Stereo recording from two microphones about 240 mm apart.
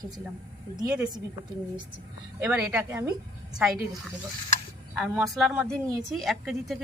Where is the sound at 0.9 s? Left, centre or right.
Centre.